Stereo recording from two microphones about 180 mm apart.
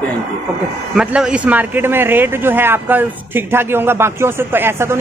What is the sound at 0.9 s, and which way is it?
A man's voice, 5° right (ahead or behind).